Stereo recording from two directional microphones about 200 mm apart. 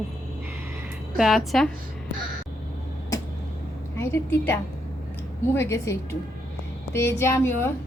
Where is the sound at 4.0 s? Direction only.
10° left (ahead or behind).